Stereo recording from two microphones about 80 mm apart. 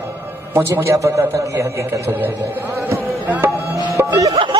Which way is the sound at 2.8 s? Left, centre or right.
Right.